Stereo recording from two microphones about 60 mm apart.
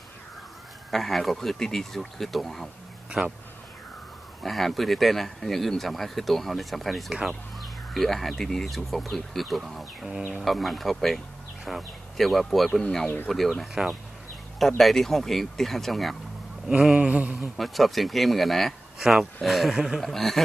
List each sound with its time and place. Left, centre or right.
0.9 s speech: centre
3.1 s speech: centre
4.4 s speech: centre
14.8 s speech: centre
16.9 s a sound: centre
17.6 s speech: centre
20.0 s speech: centre